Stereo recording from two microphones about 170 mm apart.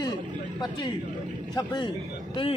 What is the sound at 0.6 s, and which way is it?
Speech, 25° left (ahead or behind).